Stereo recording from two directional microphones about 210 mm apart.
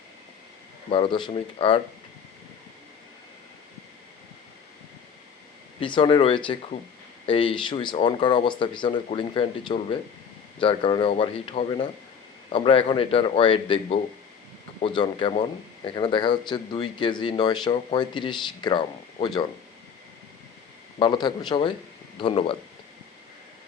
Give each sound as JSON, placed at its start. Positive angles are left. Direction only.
{"t": 0.9, "sound": "speech", "side_deg": 25}
{"t": 5.8, "sound": "speech", "side_deg": 25}
{"t": 21.0, "sound": "speech", "side_deg": 20}